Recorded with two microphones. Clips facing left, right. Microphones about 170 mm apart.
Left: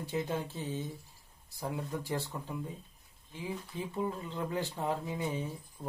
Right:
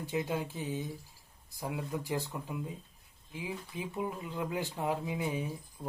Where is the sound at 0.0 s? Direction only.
15° right (ahead or behind).